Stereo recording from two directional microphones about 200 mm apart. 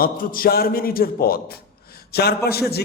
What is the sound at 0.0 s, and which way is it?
A man's voice, 45° left (ahead or behind).